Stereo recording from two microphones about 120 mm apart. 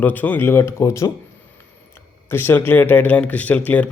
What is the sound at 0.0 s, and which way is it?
Speech, 15° left (ahead or behind).